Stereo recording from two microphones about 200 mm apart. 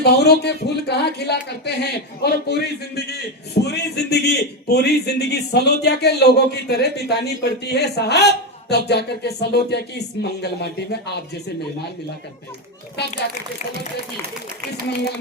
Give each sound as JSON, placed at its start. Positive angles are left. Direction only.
{"t": 0.0, "sound": "a man's voice", "side_deg": 55}